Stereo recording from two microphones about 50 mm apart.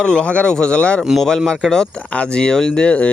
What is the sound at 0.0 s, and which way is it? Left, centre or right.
Speech, centre.